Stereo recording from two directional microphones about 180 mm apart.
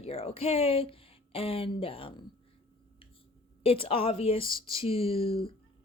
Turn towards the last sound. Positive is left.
turn(degrees=30)  # may be behind; listen again after turning